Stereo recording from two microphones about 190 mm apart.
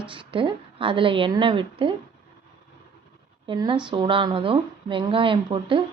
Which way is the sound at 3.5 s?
25° right (ahead or behind).